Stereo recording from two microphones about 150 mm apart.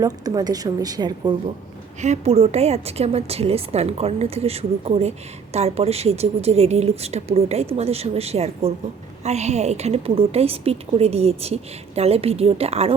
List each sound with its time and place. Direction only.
0.0 s a woman's voice: 25° right (ahead or behind)
2.0 s a woman's voice: 45° right (ahead or behind)